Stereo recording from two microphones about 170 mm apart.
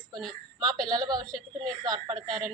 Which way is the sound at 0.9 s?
25° right (ahead or behind).